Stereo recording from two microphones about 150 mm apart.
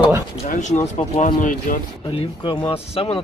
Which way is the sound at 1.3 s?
60° left (ahead or behind).